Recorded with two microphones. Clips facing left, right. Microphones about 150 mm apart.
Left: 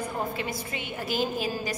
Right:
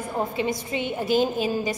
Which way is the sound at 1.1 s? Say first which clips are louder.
Right 6 dB; centre (ahead or behind).